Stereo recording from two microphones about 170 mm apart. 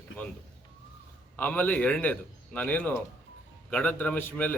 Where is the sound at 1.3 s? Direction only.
10° left (ahead or behind).